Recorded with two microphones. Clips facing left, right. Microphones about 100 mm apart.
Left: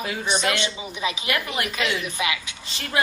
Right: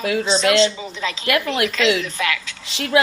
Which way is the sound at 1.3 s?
90° right.